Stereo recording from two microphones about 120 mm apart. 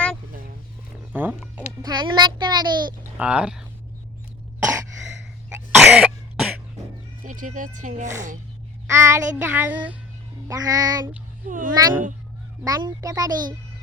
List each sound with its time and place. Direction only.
1.1 s speech: 15° right (ahead or behind)
1.8 s a child's voice: 35° right (ahead or behind)
3.2 s speech: 10° right (ahead or behind)
5.5 s cough: 20° right (ahead or behind)
5.9 s cough: 5° right (ahead or behind)
7.3 s speech: 90° right
8.9 s speech: 25° right (ahead or behind)
9.3 s child singing: 15° right (ahead or behind)
10.5 s speech: 30° right (ahead or behind)